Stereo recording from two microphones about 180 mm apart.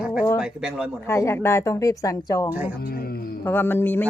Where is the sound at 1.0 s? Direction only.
15° left (ahead or behind).